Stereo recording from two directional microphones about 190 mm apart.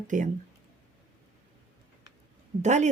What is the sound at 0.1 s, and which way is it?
Speech, 40° right (ahead or behind).